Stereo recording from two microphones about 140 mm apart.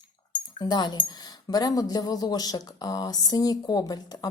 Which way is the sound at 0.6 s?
30° left (ahead or behind).